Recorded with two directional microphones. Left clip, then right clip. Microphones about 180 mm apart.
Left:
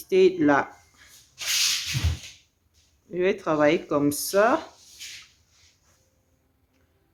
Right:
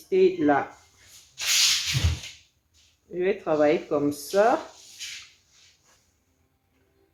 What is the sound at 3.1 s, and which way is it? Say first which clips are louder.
Speech: left 1 dB; 40° left (ahead or behind).